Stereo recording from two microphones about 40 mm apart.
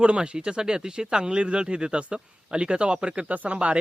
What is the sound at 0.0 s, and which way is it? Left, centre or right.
Speech, right.